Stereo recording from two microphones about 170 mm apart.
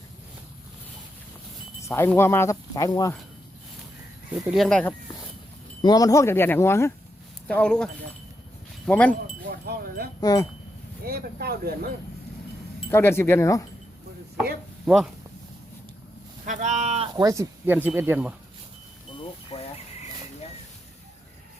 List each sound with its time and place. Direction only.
1.8 s speech: 15° left (ahead or behind)
4.5 s speech: centre (ahead or behind)
5.8 s speech: 20° left (ahead or behind); by 7.9 s 5° left (ahead or behind)
8.9 s speech: 10° left (ahead or behind)
9.5 s speech: 65° right (ahead or behind)
10.2 s speech: 20° left (ahead or behind)
11.0 s speech: 65° right (ahead or behind)
12.9 s speech: 15° left (ahead or behind)
14.8 s speech: 5° right (ahead or behind)
16.5 s speech: 45° right (ahead or behind)
17.2 s speech: 20° right (ahead or behind)
19.5 s a sound: 40° left (ahead or behind)